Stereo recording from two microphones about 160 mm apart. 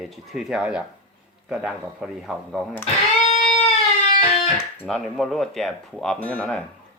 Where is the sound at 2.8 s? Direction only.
40° left (ahead or behind).